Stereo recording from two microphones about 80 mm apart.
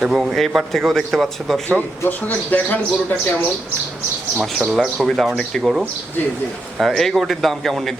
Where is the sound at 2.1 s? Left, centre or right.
Left.